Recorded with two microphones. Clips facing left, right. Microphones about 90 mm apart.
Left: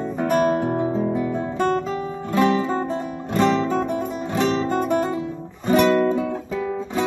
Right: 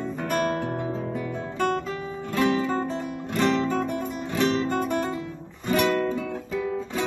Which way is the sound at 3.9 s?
20° left (ahead or behind).